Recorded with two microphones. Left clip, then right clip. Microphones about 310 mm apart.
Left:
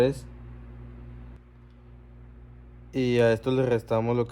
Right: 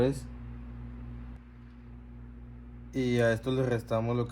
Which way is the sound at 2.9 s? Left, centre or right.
Left.